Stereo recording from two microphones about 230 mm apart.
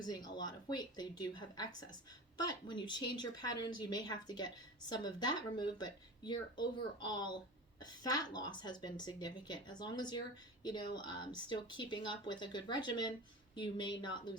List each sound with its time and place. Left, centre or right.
0.0 s a woman's voice: centre